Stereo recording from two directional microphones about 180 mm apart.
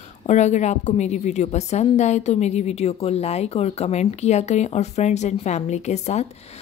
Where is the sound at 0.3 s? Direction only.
40° left (ahead or behind).